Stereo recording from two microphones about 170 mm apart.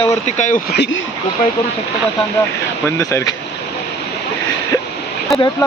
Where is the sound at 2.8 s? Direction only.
20° left (ahead or behind).